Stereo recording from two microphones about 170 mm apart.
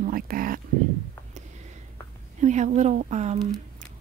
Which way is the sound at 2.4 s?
45° right (ahead or behind).